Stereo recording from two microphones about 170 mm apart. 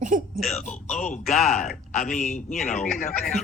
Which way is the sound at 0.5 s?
45° left (ahead or behind).